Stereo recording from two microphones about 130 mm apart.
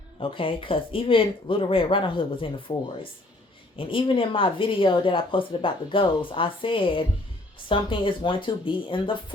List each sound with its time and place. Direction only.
0.2 s a woman's voice: 45° left (ahead or behind)